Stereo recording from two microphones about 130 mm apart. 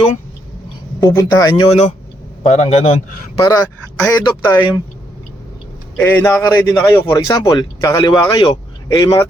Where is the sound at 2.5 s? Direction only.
55° left (ahead or behind).